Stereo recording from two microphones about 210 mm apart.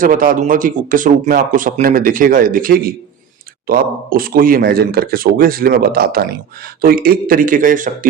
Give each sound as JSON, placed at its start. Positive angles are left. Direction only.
{"t": 0.0, "sound": "speech", "side_deg": -40}